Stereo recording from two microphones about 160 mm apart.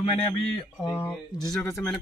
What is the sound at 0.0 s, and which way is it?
Speech, 40° left (ahead or behind).